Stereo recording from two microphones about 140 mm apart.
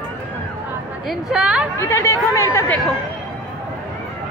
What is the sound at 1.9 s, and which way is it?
Chatter, 20° left (ahead or behind).